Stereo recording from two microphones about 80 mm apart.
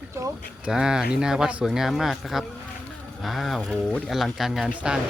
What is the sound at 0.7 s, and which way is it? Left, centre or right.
A man's voice, centre.